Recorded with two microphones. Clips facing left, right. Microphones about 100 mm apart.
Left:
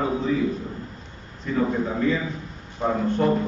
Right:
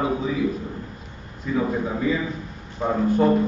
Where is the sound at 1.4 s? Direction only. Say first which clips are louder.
Even; 10° right (ahead or behind).